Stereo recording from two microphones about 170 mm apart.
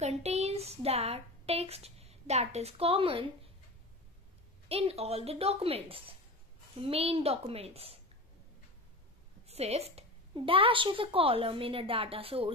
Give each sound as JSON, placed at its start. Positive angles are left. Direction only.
{"t": 0.0, "sound": "speech", "side_deg": -40}
{"t": 4.6, "sound": "a woman's voice", "side_deg": -35}
{"t": 9.5, "sound": "a woman's voice", "side_deg": -35}